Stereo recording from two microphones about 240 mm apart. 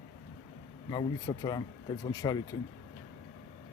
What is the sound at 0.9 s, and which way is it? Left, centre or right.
Speech, centre.